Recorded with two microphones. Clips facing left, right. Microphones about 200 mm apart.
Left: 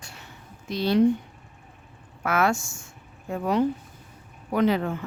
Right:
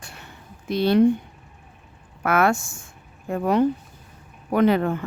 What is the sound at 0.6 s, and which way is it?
Speech, 60° right (ahead or behind).